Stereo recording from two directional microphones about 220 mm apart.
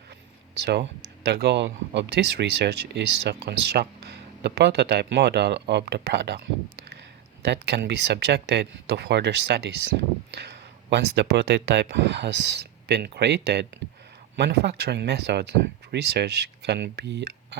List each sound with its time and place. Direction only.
0.6 s speech: 50° right (ahead or behind)